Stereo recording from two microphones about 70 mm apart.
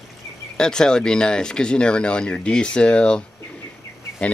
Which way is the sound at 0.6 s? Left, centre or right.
Centre.